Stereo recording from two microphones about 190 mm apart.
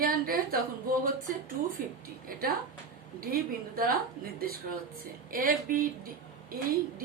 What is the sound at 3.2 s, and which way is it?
Speech, 50° right (ahead or behind).